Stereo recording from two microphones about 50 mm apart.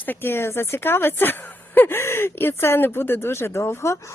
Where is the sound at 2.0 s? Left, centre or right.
Left.